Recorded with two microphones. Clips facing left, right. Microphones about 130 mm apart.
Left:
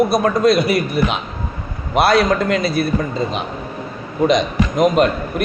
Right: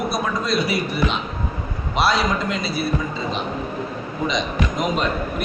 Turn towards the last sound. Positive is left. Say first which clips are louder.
# left 7 dB
turn(degrees=55)  # may be behind; listen again after turning